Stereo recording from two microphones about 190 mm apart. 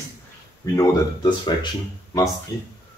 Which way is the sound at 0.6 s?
15° left (ahead or behind).